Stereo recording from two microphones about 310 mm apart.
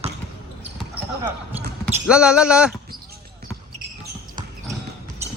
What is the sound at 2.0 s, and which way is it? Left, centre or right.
Speech, centre.